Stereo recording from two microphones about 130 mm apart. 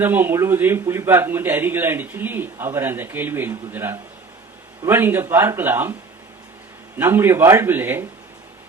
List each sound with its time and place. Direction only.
0.0 s a man's voice: 15° right (ahead or behind)
6.9 s a man's voice: 20° right (ahead or behind)